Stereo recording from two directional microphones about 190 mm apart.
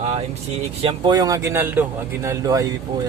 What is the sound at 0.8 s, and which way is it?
A man's voice, 25° right (ahead or behind).